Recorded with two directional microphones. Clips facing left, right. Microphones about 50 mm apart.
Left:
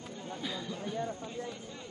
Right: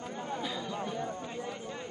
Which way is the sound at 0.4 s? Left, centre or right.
Centre.